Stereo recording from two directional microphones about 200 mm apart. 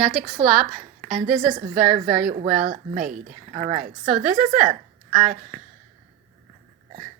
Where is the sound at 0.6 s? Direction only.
35° right (ahead or behind).